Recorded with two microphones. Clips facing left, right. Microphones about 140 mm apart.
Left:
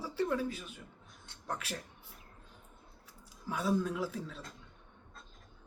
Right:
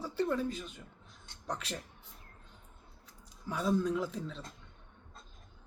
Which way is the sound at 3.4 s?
5° left (ahead or behind).